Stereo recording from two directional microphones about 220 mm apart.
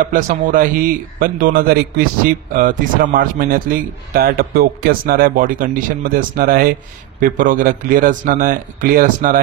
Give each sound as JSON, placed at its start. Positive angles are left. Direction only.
{"t": 0.0, "sound": "a man's voice", "side_deg": -40}